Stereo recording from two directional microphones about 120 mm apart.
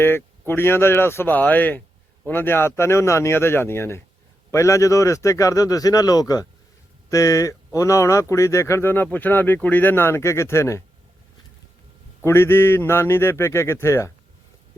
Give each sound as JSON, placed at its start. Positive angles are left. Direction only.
{"t": 0.0, "sound": "speech", "side_deg": 20}
{"t": 12.2, "sound": "speech", "side_deg": 20}